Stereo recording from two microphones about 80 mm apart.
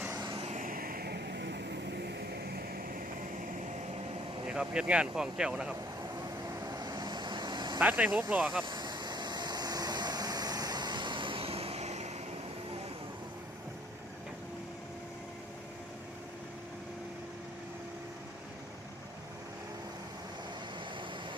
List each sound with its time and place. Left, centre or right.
0.1 s vehicle: right
4.4 s speech: centre
6.7 s vehicle: right
7.8 s speech: centre
8.3 s speech: centre
8.6 s vehicle: right